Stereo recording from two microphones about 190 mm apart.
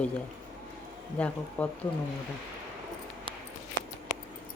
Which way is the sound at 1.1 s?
5° left (ahead or behind).